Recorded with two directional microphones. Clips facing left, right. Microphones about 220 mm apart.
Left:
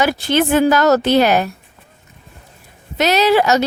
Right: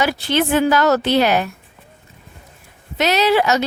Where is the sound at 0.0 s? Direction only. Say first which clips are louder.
Left 3 dB; 45° left (ahead or behind).